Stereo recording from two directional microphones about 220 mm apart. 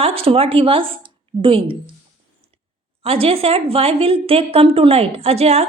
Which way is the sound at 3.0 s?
25° right (ahead or behind).